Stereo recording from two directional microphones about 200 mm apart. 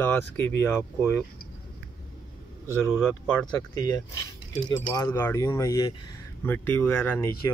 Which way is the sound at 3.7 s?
15° left (ahead or behind).